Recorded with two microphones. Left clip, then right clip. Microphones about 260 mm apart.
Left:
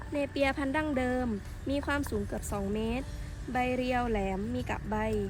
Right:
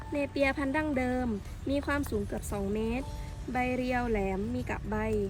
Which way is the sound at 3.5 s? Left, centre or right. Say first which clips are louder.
Left 1 dB; left.